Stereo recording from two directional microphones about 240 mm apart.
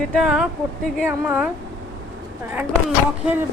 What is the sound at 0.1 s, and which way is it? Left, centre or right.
A woman's voice, centre.